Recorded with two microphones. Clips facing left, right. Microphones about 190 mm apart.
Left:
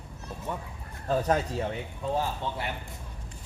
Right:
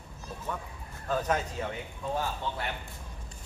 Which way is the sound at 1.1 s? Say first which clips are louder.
Left 4 dB; 35° left (ahead or behind).